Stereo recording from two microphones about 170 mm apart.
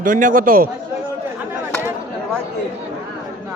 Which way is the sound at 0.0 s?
50° right (ahead or behind).